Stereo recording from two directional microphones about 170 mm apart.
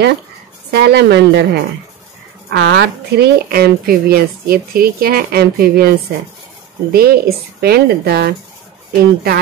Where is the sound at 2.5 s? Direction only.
70° right (ahead or behind).